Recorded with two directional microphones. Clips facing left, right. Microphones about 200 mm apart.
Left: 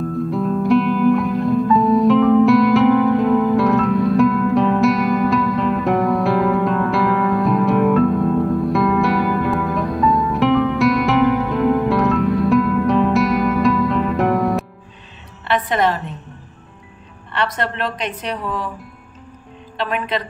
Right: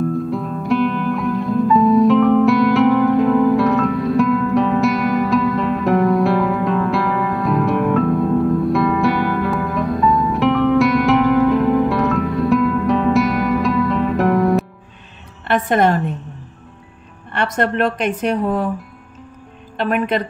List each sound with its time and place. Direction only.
0.3 s music: centre (ahead or behind)
15.4 s music: 50° right (ahead or behind)
17.3 s a woman's voice: 50° right (ahead or behind)
19.8 s a woman's voice: 50° right (ahead or behind)